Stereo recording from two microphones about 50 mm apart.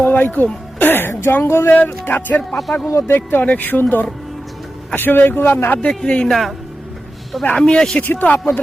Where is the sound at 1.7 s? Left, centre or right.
Left.